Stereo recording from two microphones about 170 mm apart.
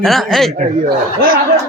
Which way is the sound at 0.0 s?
Centre (ahead or behind).